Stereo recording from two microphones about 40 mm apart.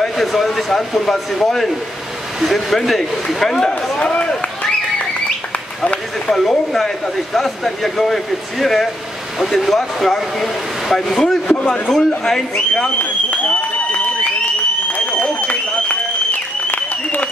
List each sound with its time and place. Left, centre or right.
0.2 s speech: centre
4.0 s speech: left
6.2 s speech: centre
11.4 s speech: left
12.0 s speech: centre
13.0 s a sound: left
16.7 s applause: left